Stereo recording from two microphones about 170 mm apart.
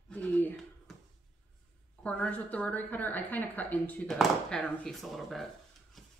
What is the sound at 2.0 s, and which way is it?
A woman's voice, 5° left (ahead or behind).